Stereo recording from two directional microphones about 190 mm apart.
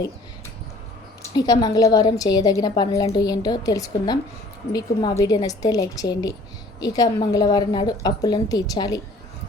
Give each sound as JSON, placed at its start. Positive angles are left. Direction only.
{"t": 1.3, "sound": "a woman's voice", "side_deg": 20}